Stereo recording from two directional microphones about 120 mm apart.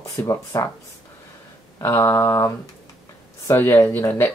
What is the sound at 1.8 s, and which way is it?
Speech, 25° left (ahead or behind).